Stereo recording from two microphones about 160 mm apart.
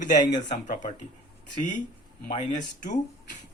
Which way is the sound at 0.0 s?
50° left (ahead or behind).